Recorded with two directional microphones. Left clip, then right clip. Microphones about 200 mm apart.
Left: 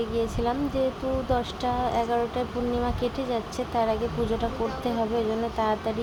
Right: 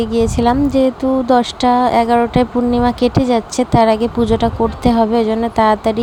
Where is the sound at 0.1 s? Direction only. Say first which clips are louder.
Right 12 dB; 45° right (ahead or behind).